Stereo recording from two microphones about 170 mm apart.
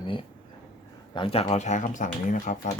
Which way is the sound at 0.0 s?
30° left (ahead or behind).